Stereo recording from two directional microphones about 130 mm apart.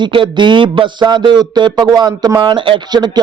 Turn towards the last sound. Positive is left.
turn(degrees=-35)  # may be behind; listen again after turning